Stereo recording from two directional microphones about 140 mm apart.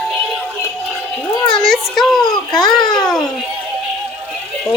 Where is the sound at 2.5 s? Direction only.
30° left (ahead or behind).